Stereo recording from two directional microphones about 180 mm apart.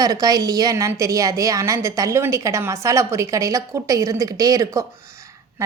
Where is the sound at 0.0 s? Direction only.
20° right (ahead or behind).